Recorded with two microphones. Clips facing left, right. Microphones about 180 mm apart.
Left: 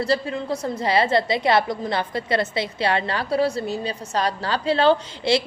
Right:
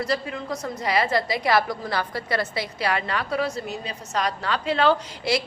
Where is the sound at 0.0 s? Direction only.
30° left (ahead or behind).